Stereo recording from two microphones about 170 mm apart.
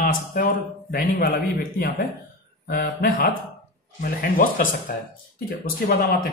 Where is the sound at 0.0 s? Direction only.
60° left (ahead or behind).